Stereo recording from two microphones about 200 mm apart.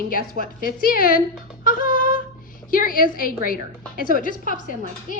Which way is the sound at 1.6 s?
45° left (ahead or behind).